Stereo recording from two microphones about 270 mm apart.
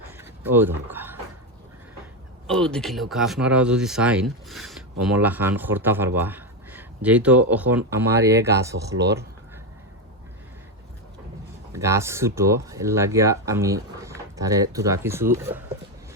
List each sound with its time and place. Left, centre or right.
0.2 s a sound: centre
2.5 s speech: centre
8.9 s speech: right
11.7 s speech: centre